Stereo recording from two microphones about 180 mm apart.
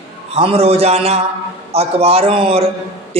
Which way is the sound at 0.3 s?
35° right (ahead or behind).